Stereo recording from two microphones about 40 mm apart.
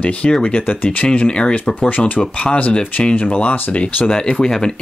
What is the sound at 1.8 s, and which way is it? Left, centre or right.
Speech, left.